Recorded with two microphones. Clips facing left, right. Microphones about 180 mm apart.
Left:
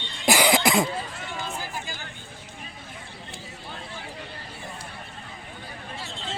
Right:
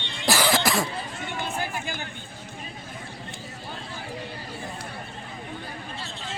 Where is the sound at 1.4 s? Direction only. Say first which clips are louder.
Right 4 dB; 60° right (ahead or behind).